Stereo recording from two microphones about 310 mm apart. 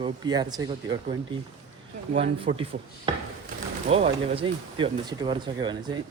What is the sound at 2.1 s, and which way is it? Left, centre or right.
Speech, centre.